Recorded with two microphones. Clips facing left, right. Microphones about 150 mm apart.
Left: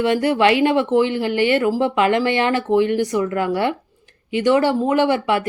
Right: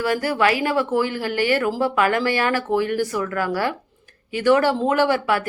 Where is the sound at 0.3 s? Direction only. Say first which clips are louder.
Left 6 dB; 25° left (ahead or behind).